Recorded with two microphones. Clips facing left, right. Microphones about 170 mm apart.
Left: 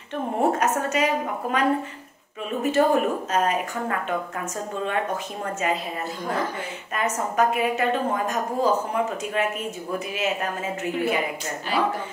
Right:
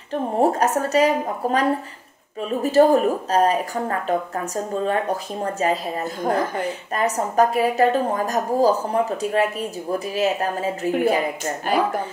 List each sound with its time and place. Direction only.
0.1 s a woman's voice: 35° right (ahead or behind)
4.8 s a woman's voice: 35° right (ahead or behind)
11.7 s speech: 50° right (ahead or behind)